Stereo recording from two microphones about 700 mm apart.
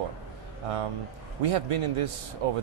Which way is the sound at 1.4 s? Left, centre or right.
Right.